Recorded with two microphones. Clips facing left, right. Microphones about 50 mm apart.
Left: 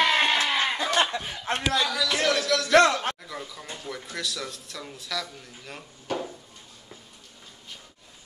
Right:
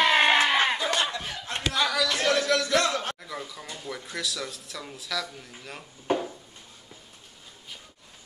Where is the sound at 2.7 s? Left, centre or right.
Left.